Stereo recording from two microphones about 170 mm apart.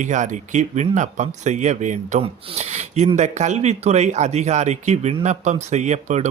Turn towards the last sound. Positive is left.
turn(degrees=-45)  # may be behind; listen again after turning